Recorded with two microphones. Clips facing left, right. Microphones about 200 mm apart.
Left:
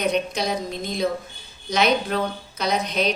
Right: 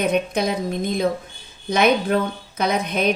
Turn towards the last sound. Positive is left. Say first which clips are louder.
# right 3 dB
turn(degrees=-55)  # may be behind; listen again after turning